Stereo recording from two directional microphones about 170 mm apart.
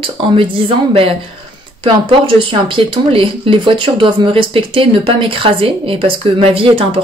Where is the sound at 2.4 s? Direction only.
30° right (ahead or behind).